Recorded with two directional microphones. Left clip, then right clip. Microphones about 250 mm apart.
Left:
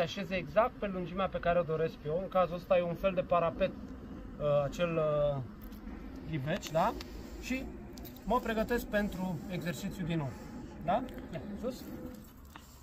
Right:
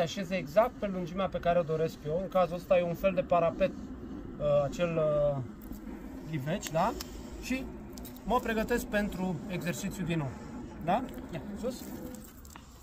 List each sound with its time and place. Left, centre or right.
0.0 s speech: centre
6.3 s speech: centre